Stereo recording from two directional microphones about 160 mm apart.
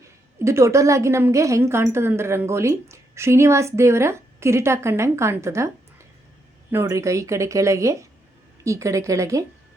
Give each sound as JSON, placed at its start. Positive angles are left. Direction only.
{"t": 0.3, "sound": "a woman's voice", "side_deg": -15}